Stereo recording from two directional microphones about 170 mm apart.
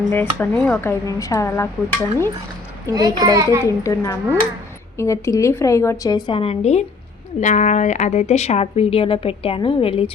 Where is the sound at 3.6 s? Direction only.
20° left (ahead or behind).